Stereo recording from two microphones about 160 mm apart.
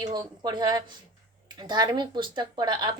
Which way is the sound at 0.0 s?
25° right (ahead or behind).